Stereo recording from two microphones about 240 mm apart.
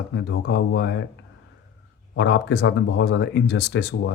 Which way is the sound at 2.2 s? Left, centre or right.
Left.